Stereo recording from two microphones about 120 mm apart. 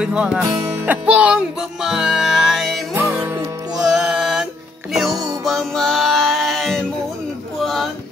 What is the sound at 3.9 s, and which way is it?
Music, 5° right (ahead or behind).